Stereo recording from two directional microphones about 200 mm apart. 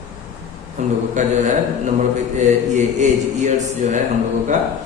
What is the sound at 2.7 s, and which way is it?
Speech, 35° right (ahead or behind).